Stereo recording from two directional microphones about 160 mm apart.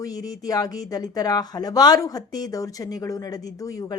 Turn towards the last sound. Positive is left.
turn(degrees=20)  # may be behind; listen again after turning